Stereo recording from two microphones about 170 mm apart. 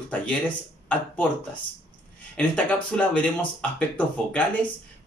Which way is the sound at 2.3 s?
5° left (ahead or behind).